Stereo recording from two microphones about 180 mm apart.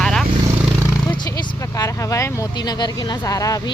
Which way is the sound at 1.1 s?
25° left (ahead or behind).